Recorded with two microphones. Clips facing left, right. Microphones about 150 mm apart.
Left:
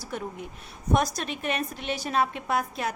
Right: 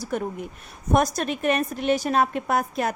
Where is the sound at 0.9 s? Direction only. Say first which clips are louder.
Right 5 dB; 50° right (ahead or behind).